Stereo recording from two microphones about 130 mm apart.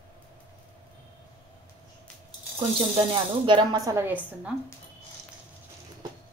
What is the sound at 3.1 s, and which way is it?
Speech, 40° right (ahead or behind).